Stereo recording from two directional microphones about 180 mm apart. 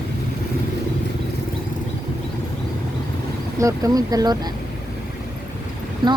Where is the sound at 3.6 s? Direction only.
20° right (ahead or behind).